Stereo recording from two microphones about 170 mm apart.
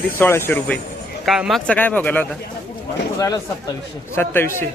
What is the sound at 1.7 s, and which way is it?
Speech, 10° left (ahead or behind).